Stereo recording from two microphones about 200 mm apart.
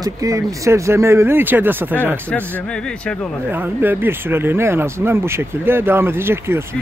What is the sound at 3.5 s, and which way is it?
Speech, 10° right (ahead or behind).